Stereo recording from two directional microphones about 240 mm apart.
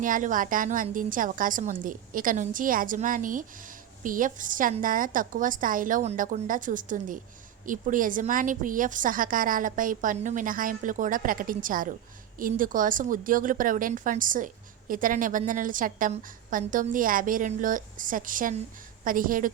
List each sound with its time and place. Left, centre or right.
0.0 s a woman's voice: right